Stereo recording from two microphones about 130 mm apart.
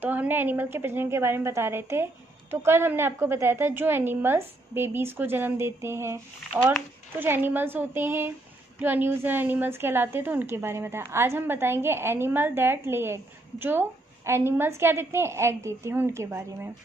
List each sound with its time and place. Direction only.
0.0 s a woman's voice: 15° right (ahead or behind)